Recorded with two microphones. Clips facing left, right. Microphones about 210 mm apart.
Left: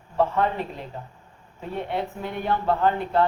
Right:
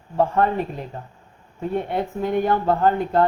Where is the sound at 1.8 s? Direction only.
45° right (ahead or behind).